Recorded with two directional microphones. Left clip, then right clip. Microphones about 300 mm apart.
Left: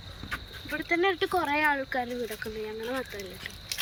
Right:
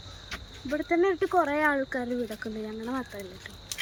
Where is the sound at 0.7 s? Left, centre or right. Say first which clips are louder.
Right 1 dB; centre.